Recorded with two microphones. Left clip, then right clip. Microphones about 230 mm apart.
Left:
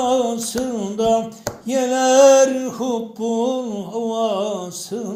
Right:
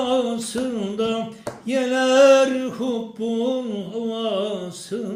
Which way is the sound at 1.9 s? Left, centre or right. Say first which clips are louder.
Left 2 dB; centre.